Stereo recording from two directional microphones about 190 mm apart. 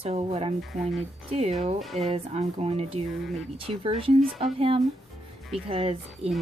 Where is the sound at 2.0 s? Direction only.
35° right (ahead or behind).